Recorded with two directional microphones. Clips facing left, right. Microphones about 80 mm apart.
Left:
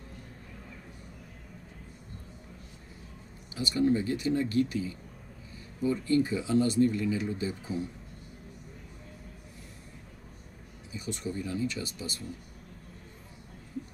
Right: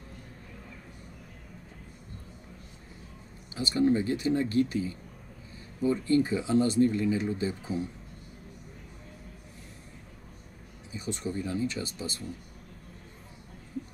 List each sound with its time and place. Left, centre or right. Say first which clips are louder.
3.5 s speech: right 1 dB; right
10.9 s speech: right 2 dB; right